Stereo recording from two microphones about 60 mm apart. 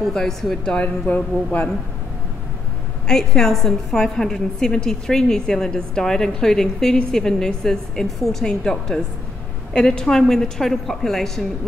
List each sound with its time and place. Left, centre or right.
0.0 s a woman's voice: centre
0.7 s speech: left
3.1 s a woman's voice: centre